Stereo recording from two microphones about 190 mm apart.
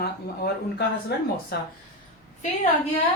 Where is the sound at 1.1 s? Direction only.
60° left (ahead or behind).